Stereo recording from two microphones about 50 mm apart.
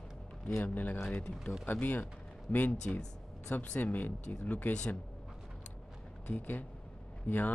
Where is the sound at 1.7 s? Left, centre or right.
Left.